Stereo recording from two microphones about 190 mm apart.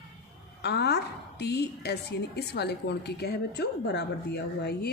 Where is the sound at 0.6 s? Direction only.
60° left (ahead or behind).